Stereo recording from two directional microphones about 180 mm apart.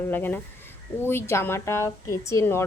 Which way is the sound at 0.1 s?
10° left (ahead or behind).